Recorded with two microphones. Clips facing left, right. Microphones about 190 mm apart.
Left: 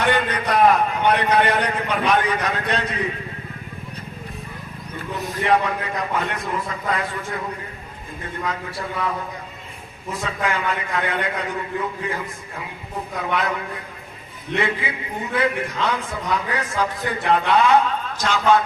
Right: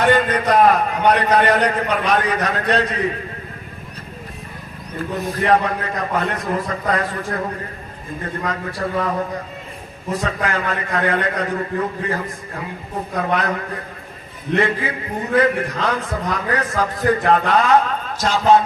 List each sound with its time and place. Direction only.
0.0 s a man's voice: 45° right (ahead or behind)
5.1 s a man's voice: 40° right (ahead or behind)
8.4 s a man's voice: 45° right (ahead or behind)
10.2 s a man's voice: 40° right (ahead or behind)
14.5 s a man's voice: 40° right (ahead or behind)